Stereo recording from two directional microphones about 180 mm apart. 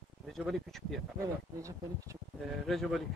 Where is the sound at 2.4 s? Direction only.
Centre (ahead or behind).